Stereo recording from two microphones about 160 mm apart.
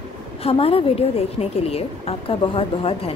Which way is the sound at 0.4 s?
35° left (ahead or behind).